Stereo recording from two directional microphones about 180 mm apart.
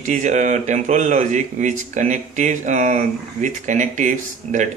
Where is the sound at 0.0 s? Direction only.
40° right (ahead or behind).